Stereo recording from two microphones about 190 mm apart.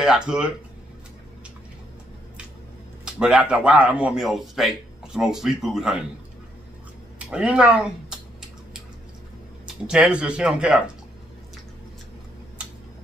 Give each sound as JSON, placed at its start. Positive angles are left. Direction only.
{"t": 0.0, "sound": "speech", "side_deg": -5}
{"t": 3.1, "sound": "speech", "side_deg": -5}
{"t": 7.2, "sound": "a sound", "side_deg": -5}
{"t": 9.8, "sound": "speech", "side_deg": -5}